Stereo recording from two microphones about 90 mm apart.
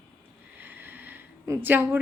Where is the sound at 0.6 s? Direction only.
20° right (ahead or behind).